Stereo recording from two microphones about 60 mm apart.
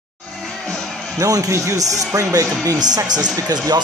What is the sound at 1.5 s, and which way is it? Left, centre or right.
Speech, right.